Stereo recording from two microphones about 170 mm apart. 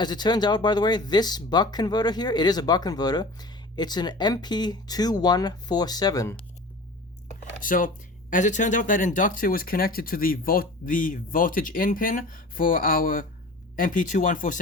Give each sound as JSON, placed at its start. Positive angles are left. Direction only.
{"t": 0.0, "sound": "speech", "side_deg": 25}
{"t": 7.6, "sound": "speech", "side_deg": 55}